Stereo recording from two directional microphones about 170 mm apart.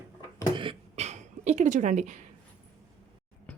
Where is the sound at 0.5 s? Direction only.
30° right (ahead or behind).